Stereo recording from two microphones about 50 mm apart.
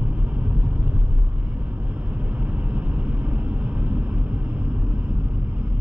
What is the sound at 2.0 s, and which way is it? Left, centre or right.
Vehicle, right.